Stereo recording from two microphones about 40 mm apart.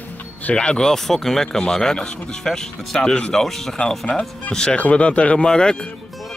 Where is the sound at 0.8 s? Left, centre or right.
Centre.